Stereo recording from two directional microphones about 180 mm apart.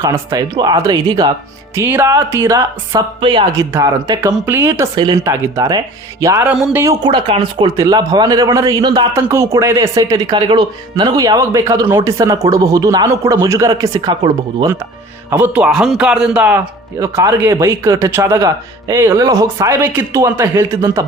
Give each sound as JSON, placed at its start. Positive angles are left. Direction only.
{"t": 0.0, "sound": "a man's voice", "side_deg": -20}
{"t": 15.3, "sound": "speech", "side_deg": -10}